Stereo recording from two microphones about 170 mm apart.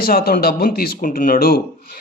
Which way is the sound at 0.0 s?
60° left (ahead or behind).